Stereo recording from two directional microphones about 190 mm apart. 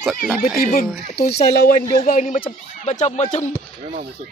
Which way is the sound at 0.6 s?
45° left (ahead or behind).